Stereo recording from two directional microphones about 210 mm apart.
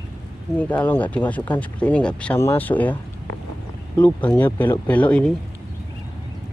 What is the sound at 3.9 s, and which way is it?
Speech, 5° left (ahead or behind).